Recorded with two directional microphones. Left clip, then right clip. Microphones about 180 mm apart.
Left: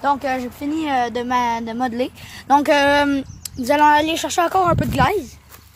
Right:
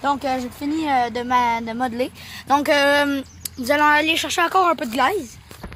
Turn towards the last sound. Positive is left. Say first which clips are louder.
# left 2 dB
turn(degrees=25)  # may be behind; listen again after turning